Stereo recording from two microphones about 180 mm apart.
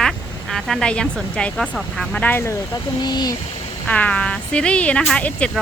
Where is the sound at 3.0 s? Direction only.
25° left (ahead or behind).